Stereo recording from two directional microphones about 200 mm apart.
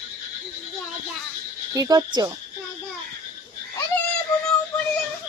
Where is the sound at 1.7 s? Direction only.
20° right (ahead or behind).